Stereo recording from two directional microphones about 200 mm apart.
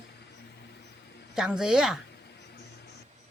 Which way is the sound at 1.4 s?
5° right (ahead or behind).